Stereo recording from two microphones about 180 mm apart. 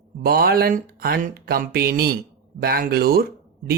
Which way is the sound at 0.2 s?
55° right (ahead or behind).